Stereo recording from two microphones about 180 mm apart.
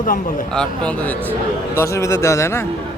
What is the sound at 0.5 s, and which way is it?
Speech, 5° left (ahead or behind).